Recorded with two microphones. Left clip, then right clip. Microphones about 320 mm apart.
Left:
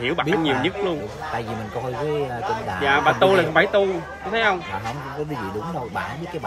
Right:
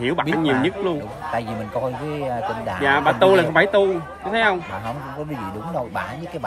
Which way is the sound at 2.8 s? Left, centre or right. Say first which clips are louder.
Right 1 dB; right.